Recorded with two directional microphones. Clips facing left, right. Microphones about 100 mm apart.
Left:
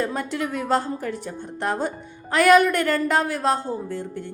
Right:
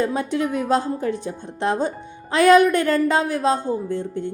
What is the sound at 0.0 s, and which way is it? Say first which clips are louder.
A woman's voice: right 4 dB; 15° right (ahead or behind).